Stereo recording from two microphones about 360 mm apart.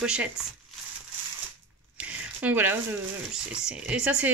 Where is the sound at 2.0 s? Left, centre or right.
Centre.